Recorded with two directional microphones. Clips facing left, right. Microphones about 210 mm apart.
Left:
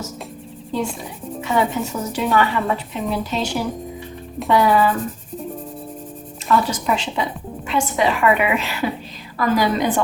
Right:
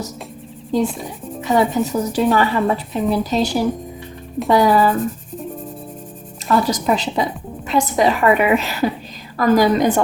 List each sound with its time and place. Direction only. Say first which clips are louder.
1.4 s a woman's voice: right 4 dB; 35° right (ahead or behind)
6.5 s a woman's voice: right 2 dB; 40° right (ahead or behind)